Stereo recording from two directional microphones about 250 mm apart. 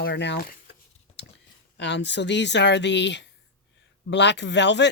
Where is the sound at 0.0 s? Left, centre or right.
Left.